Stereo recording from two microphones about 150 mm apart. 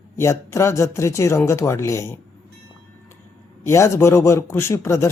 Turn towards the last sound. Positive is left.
turn(degrees=15)  # may be behind; listen again after turning